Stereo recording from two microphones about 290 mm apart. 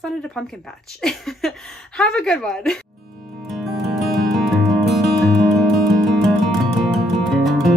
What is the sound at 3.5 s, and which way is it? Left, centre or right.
Music, centre.